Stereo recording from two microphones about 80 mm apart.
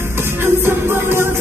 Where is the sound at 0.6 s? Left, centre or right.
Right.